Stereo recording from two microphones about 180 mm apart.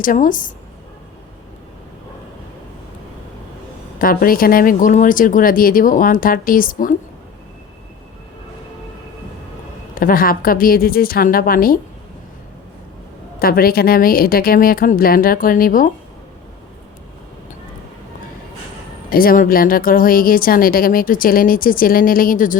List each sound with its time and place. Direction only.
0.0 s speech: 50° left (ahead or behind)
3.9 s speech: 55° left (ahead or behind)
9.9 s speech: 50° left (ahead or behind)
13.4 s speech: 55° left (ahead or behind)
19.1 s speech: 50° left (ahead or behind)